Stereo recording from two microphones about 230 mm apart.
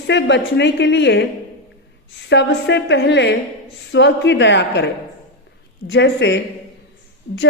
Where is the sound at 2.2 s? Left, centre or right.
Left.